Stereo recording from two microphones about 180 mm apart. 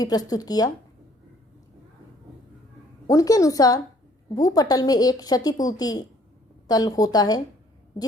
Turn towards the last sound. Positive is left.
turn(degrees=20)  # may be behind; listen again after turning